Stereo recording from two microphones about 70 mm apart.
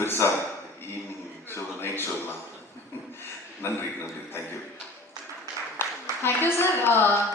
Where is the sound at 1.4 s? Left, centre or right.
Left.